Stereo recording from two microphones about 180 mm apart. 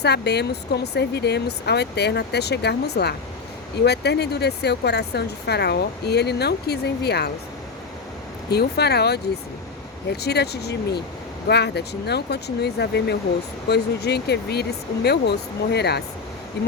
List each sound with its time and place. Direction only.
0.0 s speech: 65° left (ahead or behind)
8.4 s speech: 65° left (ahead or behind)